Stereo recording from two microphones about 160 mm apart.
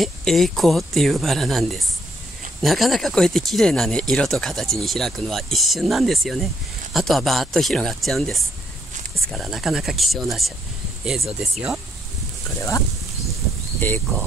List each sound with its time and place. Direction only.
0.0 s speech: centre (ahead or behind)
12.5 s speech: 20° left (ahead or behind)